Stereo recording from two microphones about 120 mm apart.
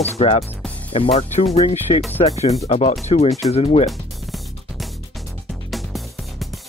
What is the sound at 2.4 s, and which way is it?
Speech, 65° left (ahead or behind).